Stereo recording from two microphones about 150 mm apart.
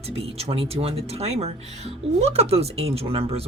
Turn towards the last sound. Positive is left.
turn(degrees=-40)  # may be behind; listen again after turning